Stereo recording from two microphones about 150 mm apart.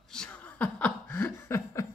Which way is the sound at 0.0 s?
5° left (ahead or behind).